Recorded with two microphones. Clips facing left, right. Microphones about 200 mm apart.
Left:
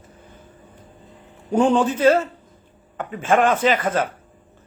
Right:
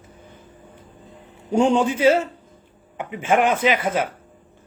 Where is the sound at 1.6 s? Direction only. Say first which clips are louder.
Even; 10° right (ahead or behind).